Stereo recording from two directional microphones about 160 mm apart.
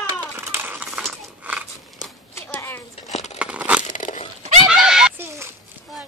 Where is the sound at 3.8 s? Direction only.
50° left (ahead or behind).